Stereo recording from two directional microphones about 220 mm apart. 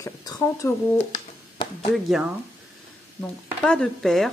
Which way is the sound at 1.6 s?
20° left (ahead or behind).